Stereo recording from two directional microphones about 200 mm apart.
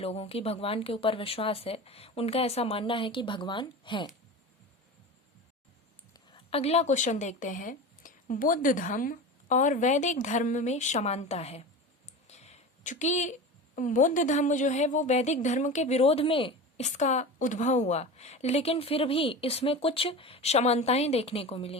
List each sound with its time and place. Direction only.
0.0 s speech: 30° left (ahead or behind)
6.3 s a woman's voice: 30° left (ahead or behind)
12.0 s clicking: 35° left (ahead or behind)
13.7 s a woman's voice: 40° left (ahead or behind)